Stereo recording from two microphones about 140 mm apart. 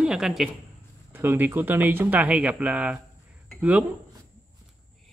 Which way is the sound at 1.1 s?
15° right (ahead or behind).